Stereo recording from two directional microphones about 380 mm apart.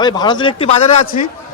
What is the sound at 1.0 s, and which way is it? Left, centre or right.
Speech, left.